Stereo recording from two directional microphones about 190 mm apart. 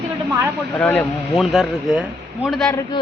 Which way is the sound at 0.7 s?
5° left (ahead or behind).